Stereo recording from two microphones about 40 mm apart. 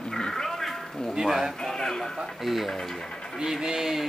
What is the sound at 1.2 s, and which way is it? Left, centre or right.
Speech, centre.